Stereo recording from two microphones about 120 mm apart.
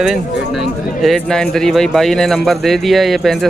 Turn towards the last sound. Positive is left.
turn(degrees=0)  # may be behind; listen again after turning